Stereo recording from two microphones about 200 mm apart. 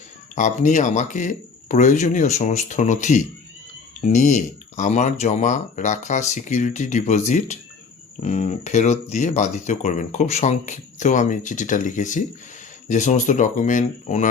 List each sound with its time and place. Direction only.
0.3 s speech: 40° left (ahead or behind)